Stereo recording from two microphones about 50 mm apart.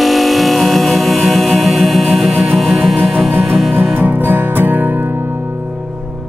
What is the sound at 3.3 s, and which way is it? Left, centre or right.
Music, right.